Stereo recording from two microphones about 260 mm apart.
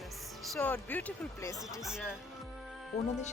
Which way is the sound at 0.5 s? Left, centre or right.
Centre.